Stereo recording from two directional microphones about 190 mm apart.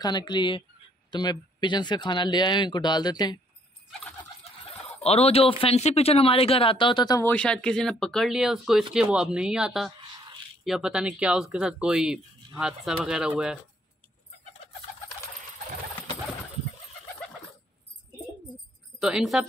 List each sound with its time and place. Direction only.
0.0 s speech: 20° left (ahead or behind)
5.0 s speech: 30° left (ahead or behind); by 13.6 s 5° right (ahead or behind)
18.9 s a woman's voice: 5° right (ahead or behind)